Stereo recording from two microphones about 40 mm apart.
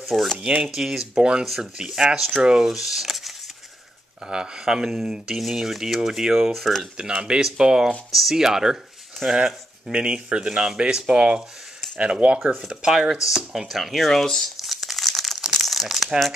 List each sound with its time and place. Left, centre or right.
0.0 s speech: centre
1.8 s speech: centre
2.7 s speech: centre
4.2 s speech: centre
6.5 s speech: centre
7.2 s speech: right
8.1 s speech: centre
9.9 s speech: right
10.5 s speech: centre
10.8 s speech: right
12.6 s speech: centre
14.2 s speech: centre
14.6 s crumpling: centre
15.6 s rattle: centre